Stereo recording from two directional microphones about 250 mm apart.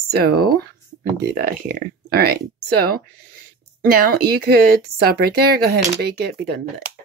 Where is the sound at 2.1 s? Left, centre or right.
Right.